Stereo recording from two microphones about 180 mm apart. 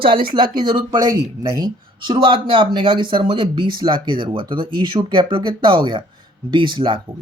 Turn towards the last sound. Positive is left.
turn(degrees=-25)  # may be behind; listen again after turning